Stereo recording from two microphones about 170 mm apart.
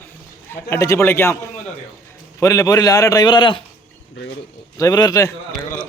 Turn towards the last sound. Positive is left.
turn(degrees=20)  # may be behind; listen again after turning